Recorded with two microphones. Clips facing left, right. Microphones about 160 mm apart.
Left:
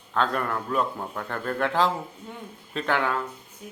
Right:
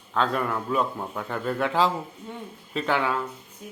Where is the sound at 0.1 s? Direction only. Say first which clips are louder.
Right 1 dB; centre (ahead or behind).